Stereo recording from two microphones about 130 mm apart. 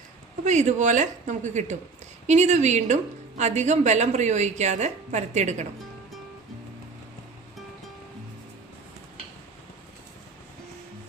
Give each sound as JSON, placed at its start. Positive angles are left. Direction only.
{"t": 0.4, "sound": "a woman's voice", "side_deg": -65}